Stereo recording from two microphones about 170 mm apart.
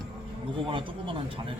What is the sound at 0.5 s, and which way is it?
Speech, 30° right (ahead or behind).